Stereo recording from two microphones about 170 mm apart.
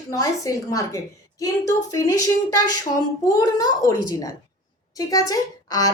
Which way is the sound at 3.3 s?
20° left (ahead or behind).